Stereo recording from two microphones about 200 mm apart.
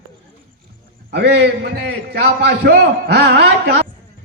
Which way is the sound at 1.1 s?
55° right (ahead or behind).